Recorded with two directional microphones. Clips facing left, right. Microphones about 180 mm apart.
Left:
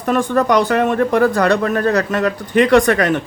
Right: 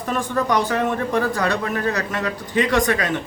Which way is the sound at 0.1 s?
70° left (ahead or behind).